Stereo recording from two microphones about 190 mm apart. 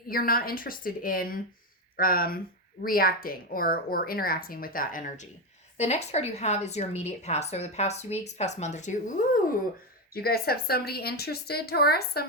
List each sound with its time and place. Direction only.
0.1 s a woman's voice: 50° left (ahead or behind)
10.2 s a woman's voice: 55° left (ahead or behind)